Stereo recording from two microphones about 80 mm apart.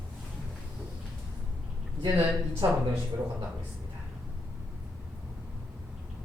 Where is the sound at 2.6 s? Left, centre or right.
Right.